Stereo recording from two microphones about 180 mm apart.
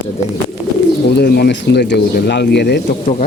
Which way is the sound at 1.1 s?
60° left (ahead or behind).